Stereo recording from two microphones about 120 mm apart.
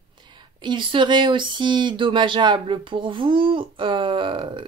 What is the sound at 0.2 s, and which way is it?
Speech, 40° right (ahead or behind).